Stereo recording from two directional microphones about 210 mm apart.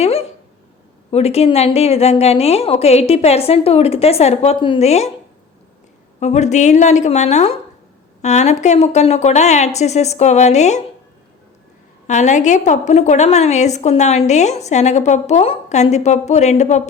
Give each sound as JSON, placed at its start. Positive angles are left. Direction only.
{"t": 0.0, "sound": "a sound", "side_deg": 30}
{"t": 1.1, "sound": "a woman's voice", "side_deg": 30}
{"t": 6.1, "sound": "a woman's voice", "side_deg": 35}
{"t": 12.0, "sound": "a woman's voice", "side_deg": 35}